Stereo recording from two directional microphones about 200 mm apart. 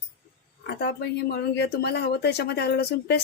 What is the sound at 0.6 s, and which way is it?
Speech, 55° left (ahead or behind).